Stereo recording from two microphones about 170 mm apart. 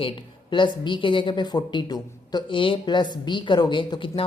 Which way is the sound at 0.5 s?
30° left (ahead or behind).